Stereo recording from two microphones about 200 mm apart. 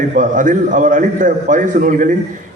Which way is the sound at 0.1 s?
40° right (ahead or behind).